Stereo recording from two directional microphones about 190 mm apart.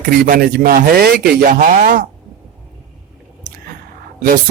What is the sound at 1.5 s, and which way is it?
Speech, 45° right (ahead or behind).